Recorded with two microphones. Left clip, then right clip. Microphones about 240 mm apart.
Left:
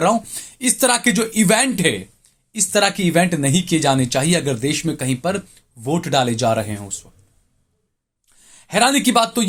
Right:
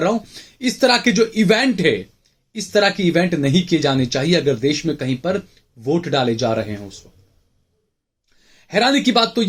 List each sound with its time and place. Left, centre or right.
0.0 s speech: left
8.4 s speech: left